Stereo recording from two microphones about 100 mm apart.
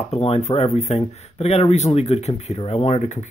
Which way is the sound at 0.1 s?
90° left.